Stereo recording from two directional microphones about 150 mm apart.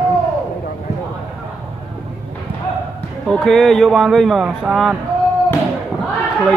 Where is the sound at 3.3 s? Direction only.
5° left (ahead or behind).